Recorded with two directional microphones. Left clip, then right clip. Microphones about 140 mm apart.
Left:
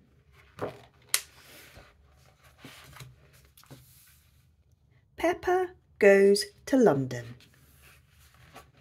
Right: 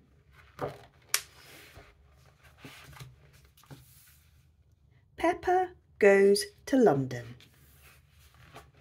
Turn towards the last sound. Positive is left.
turn(degrees=15)  # may be behind; listen again after turning